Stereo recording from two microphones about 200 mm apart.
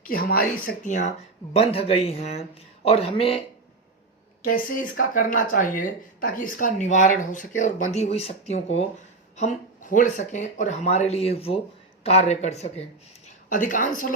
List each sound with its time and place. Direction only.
0.0 s speech: 45° left (ahead or behind); by 3.4 s 30° left (ahead or behind)
4.4 s a woman's voice: 45° left (ahead or behind)